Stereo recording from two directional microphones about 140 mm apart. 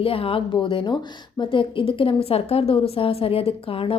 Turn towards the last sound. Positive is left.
turn(degrees=40)  # may be behind; listen again after turning